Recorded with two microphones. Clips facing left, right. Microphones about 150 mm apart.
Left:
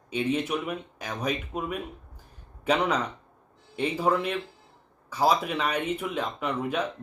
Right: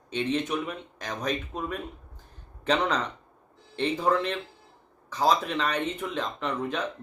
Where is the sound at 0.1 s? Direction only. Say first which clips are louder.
Left 1 dB; 10° left (ahead or behind).